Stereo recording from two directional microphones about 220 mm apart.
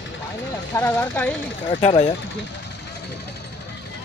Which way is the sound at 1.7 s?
30° left (ahead or behind).